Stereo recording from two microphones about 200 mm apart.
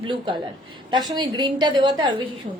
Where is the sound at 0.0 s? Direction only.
25° right (ahead or behind).